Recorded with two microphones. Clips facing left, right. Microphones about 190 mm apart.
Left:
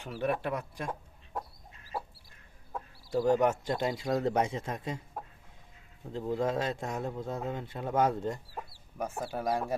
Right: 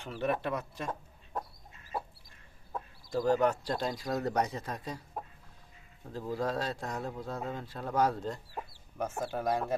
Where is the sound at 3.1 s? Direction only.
20° left (ahead or behind).